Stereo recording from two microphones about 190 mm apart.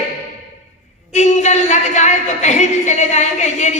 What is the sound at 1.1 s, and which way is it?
A man's voice, 35° left (ahead or behind).